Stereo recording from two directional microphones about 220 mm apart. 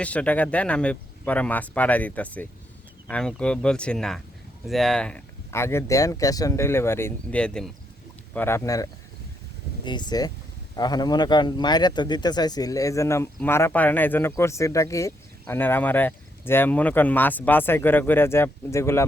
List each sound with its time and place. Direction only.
0.0 s speech: 5° left (ahead or behind)